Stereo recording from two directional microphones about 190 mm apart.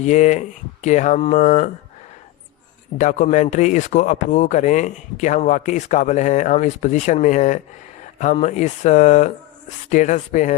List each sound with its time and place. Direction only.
0.0 s speech: 40° left (ahead or behind)
3.0 s speech: 40° left (ahead or behind)